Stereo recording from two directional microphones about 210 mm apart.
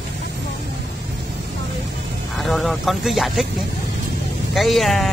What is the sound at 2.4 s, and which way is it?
Speech, centre (ahead or behind).